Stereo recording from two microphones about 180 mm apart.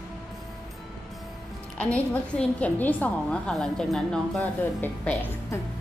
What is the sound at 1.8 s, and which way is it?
A woman's voice, 10° left (ahead or behind).